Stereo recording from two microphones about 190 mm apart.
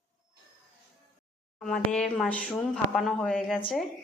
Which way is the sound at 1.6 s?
5° left (ahead or behind).